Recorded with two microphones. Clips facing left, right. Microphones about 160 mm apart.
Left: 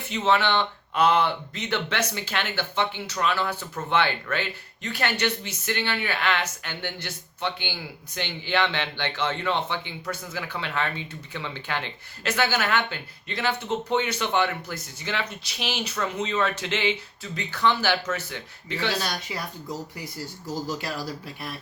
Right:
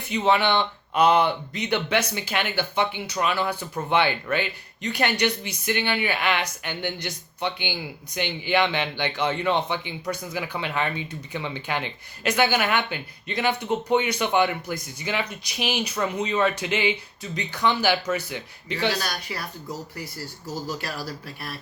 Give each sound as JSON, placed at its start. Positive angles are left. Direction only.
{"t": 0.1, "sound": "speech", "side_deg": -15}
{"t": 18.9, "sound": "speech", "side_deg": 20}